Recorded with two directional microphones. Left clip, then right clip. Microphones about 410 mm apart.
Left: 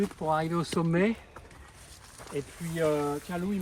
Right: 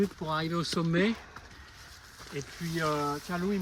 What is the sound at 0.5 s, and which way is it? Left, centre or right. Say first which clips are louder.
Speech: left 1 dB; centre.